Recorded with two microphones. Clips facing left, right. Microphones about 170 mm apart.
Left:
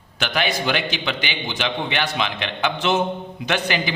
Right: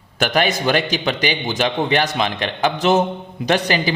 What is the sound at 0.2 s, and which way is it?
A man's voice, 45° right (ahead or behind).